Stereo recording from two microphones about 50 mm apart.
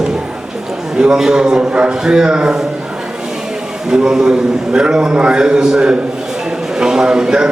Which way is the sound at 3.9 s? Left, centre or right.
Centre.